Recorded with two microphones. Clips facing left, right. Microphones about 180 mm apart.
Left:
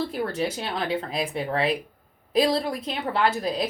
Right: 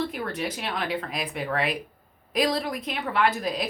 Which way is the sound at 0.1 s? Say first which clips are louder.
Left 4 dB; 30° left (ahead or behind).